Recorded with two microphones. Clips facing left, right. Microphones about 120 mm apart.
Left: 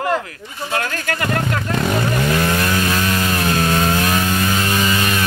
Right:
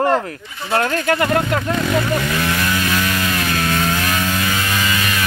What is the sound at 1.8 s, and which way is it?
Chainsaw, 30° left (ahead or behind).